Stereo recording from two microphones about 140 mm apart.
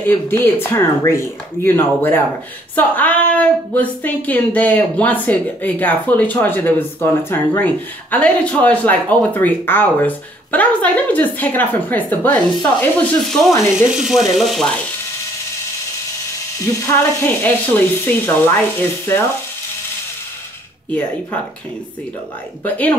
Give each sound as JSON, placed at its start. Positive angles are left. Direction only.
{"t": 0.0, "sound": "a woman's voice", "side_deg": 15}
{"t": 16.8, "sound": "a woman's voice", "side_deg": 15}
{"t": 22.6, "sound": "a woman's voice", "side_deg": 10}